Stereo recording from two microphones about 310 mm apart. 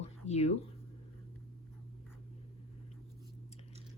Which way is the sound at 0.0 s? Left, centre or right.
Left.